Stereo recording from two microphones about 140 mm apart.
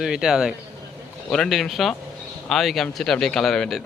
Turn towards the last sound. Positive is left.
turn(degrees=0)  # may be behind; listen again after turning